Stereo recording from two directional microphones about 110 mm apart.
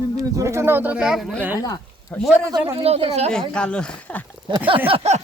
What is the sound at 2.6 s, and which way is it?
Speech, 65° right (ahead or behind).